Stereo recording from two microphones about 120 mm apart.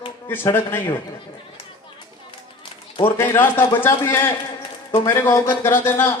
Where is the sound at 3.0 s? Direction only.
20° left (ahead or behind).